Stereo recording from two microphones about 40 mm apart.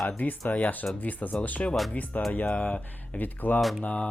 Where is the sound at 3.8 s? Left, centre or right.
Left.